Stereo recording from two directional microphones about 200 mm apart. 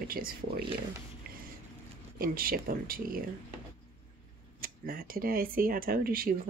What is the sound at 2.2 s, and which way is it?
Speech, 45° right (ahead or behind).